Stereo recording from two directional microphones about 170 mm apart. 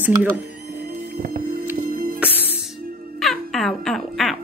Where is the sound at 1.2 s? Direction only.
60° right (ahead or behind).